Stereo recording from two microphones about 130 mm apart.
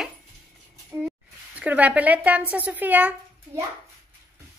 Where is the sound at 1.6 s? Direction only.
10° right (ahead or behind).